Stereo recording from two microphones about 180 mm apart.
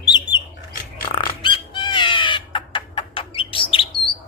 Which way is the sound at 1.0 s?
25° left (ahead or behind).